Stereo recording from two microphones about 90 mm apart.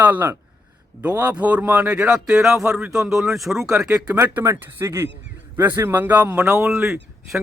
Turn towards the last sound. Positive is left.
turn(degrees=-10)  # may be behind; listen again after turning